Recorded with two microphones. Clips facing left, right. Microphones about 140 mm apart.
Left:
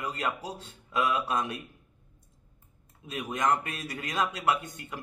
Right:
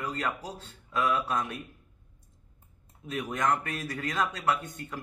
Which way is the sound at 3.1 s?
15° left (ahead or behind).